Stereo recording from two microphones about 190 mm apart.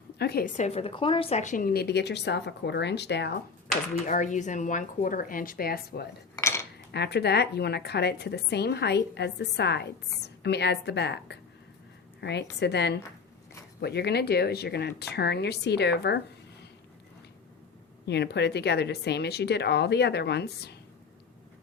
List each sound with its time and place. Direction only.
0.2 s a woman's voice: 55° left (ahead or behind)
0.5 s a woman's voice: 35° left (ahead or behind); by 3.3 s 65° left (ahead or behind)
4.0 s a woman's voice: 40° left (ahead or behind); by 16.2 s 60° left (ahead or behind)
18.0 s a woman's voice: 60° left (ahead or behind)